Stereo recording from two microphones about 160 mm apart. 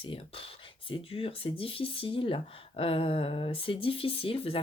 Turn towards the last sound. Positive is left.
turn(degrees=35)  # may be behind; listen again after turning